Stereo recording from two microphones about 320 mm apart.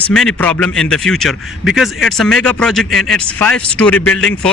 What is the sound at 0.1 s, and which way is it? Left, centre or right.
Speech, centre.